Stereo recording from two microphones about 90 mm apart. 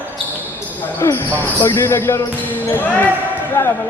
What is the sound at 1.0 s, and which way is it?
Speech, 35° left (ahead or behind).